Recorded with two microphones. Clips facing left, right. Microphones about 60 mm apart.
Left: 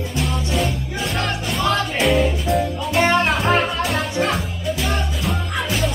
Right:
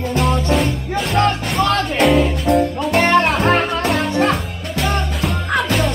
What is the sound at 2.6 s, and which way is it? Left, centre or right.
Music, right.